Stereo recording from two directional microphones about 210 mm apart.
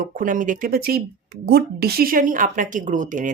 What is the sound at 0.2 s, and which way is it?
A woman's voice, 40° right (ahead or behind).